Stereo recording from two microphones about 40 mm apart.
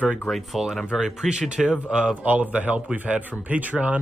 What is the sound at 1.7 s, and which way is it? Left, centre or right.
Speech, right.